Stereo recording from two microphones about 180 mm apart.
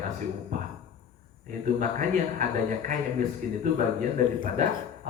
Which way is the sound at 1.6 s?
45° right (ahead or behind).